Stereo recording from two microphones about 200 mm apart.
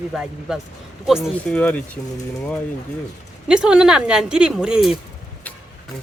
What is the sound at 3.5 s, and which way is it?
A woman's voice, 5° right (ahead or behind).